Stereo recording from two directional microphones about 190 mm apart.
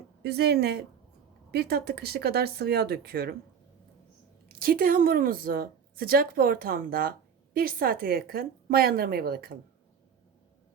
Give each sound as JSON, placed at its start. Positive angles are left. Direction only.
{"t": 0.2, "sound": "speech", "side_deg": -60}
{"t": 4.4, "sound": "a woman's voice", "side_deg": -50}